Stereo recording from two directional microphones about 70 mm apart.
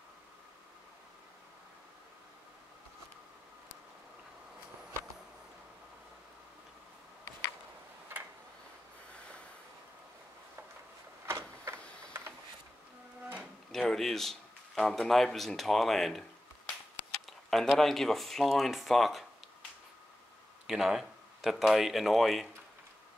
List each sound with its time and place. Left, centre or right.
9.1 s snort: centre
11.2 s printer: right
13.4 s speech: centre
17.3 s a sound: centre
17.7 s speech: centre
20.6 s speech: centre